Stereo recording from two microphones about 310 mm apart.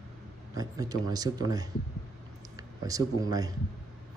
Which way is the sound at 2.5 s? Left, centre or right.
Centre.